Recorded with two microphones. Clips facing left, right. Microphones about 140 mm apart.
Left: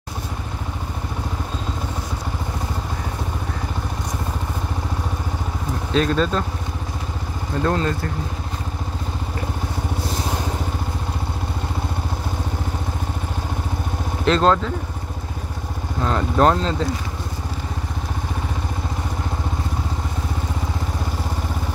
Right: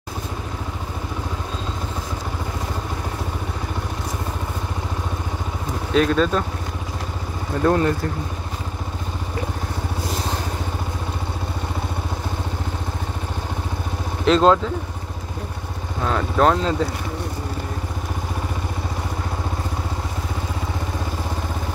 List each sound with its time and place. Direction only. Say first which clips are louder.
5.9 s speech: right 2 dB; 5° right (ahead or behind)
7.6 s speech: right 4 dB; 15° right (ahead or behind)
14.2 s speech: right 2 dB; 5° right (ahead or behind)
16.0 s speech: left 1 dB; centre (ahead or behind)